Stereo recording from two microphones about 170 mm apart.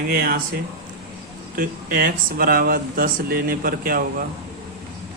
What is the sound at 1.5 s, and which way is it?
Speech, 55° right (ahead or behind).